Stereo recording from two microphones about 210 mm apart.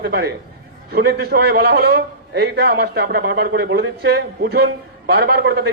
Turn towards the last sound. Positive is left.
turn(degrees=-50)  # may be behind; listen again after turning